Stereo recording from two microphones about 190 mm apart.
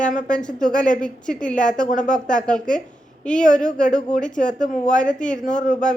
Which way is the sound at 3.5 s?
5° left (ahead or behind).